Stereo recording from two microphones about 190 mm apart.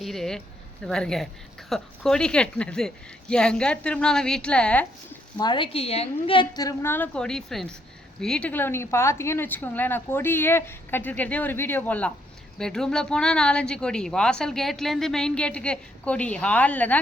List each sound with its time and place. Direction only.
0.0 s speech: centre (ahead or behind)
5.4 s a woman's voice: 25° left (ahead or behind); by 17.0 s 10° left (ahead or behind)